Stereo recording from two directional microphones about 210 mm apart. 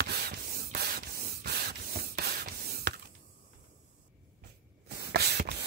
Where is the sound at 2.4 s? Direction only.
45° right (ahead or behind).